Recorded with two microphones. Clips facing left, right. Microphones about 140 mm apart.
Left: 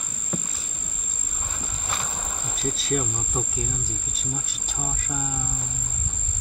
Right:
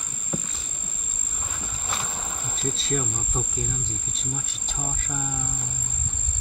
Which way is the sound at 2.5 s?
5° left (ahead or behind).